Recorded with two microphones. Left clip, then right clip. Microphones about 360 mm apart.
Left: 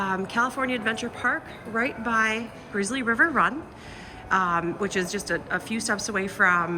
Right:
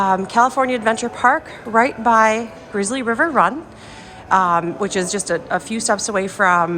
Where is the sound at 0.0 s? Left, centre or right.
Centre.